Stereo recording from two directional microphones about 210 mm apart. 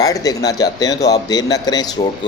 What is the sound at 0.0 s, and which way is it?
Speech, 15° left (ahead or behind).